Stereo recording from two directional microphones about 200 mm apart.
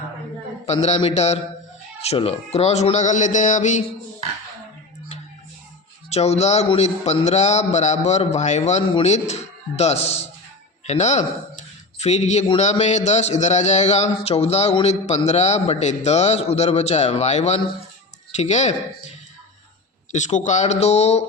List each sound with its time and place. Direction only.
0.6 s a man's voice: 30° left (ahead or behind)
6.1 s a man's voice: 30° left (ahead or behind)
20.1 s a man's voice: 35° left (ahead or behind)